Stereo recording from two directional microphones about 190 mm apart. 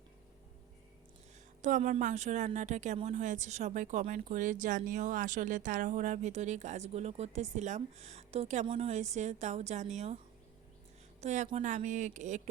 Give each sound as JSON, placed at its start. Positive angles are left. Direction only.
{"t": 1.6, "sound": "a woman's voice", "side_deg": -40}
{"t": 11.2, "sound": "a woman's voice", "side_deg": -35}